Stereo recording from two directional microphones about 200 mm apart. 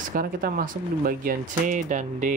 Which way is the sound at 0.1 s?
45° right (ahead or behind).